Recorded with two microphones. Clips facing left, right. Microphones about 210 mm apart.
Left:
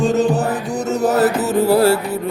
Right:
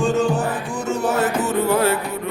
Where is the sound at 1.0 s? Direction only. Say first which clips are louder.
Left 5 dB; 35° left (ahead or behind).